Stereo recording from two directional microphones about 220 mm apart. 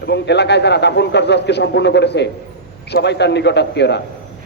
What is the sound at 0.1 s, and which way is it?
A man's voice, 50° left (ahead or behind).